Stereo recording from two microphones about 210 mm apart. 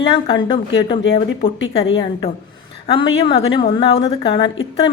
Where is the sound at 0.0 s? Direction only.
25° left (ahead or behind).